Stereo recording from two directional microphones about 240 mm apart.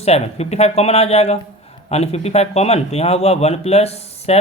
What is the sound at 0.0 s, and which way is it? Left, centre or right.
Speech, left.